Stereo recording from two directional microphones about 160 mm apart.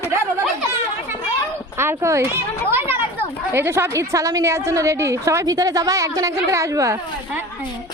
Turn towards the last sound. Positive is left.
turn(degrees=-20)  # may be behind; listen again after turning